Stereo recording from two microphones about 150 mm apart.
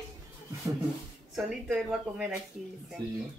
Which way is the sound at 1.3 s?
5° right (ahead or behind).